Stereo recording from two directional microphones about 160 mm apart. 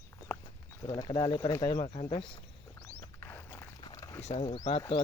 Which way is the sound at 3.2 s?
15° left (ahead or behind).